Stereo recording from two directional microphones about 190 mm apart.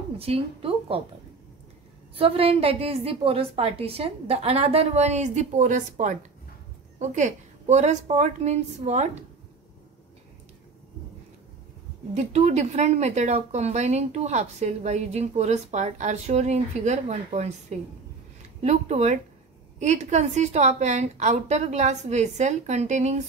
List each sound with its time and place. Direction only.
0.2 s a woman's voice: 30° right (ahead or behind)
2.1 s speech: 30° right (ahead or behind)
12.1 s speech: 35° right (ahead or behind)